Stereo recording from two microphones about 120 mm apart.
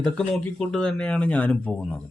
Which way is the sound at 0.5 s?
5° left (ahead or behind).